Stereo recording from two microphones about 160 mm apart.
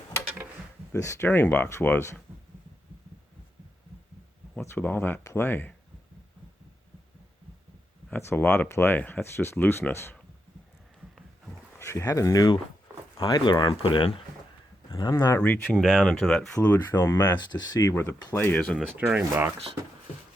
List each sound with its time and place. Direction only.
0.9 s speech: 20° left (ahead or behind)
4.5 s speech: 10° left (ahead or behind)
8.1 s speech: 15° left (ahead or behind)
11.8 s speech: 20° left (ahead or behind); by 14.1 s 35° left (ahead or behind)
15.1 s speech: 15° left (ahead or behind)
18.3 s speech: 10° left (ahead or behind)
19.3 s speech: 15° right (ahead or behind)